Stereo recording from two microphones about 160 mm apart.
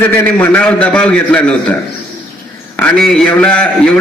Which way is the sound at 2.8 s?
5° left (ahead or behind).